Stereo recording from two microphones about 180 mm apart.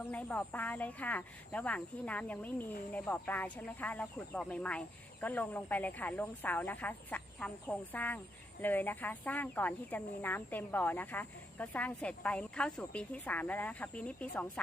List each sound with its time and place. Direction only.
0.0 s speech: 10° left (ahead or behind)